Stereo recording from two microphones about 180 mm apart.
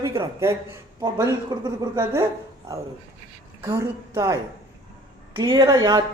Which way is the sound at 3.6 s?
15° right (ahead or behind).